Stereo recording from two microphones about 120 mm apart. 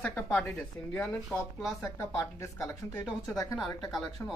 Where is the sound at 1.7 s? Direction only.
20° left (ahead or behind).